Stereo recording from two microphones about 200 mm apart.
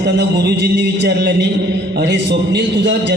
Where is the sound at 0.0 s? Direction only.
55° right (ahead or behind).